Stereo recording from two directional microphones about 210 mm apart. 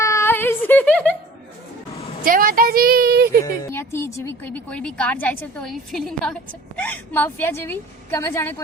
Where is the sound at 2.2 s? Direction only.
40° right (ahead or behind).